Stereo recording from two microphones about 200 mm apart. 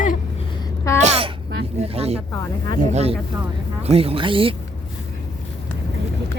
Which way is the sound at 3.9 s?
30° right (ahead or behind).